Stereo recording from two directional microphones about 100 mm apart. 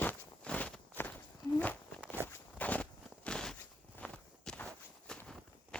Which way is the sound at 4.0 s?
10° left (ahead or behind).